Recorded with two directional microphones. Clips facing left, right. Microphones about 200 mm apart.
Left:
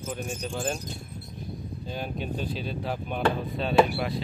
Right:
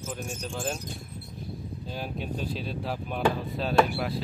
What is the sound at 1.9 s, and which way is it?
Speech, centre (ahead or behind).